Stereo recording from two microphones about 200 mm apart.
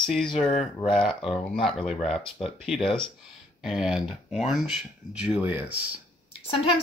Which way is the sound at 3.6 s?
Centre (ahead or behind).